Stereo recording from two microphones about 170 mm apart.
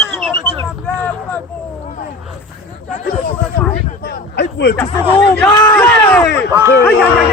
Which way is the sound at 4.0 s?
80° left.